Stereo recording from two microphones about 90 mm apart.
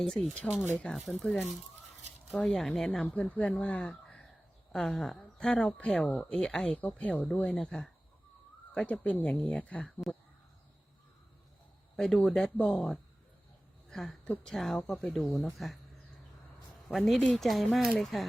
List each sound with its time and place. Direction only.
0.0 s speech: centre (ahead or behind)
3.0 s speech: 15° left (ahead or behind)
11.9 s speech: 5° left (ahead or behind)
16.9 s speech: centre (ahead or behind)